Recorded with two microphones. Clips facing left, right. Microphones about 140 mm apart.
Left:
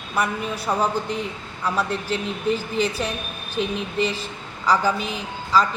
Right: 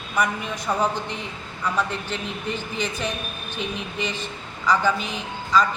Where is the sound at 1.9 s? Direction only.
40° left (ahead or behind).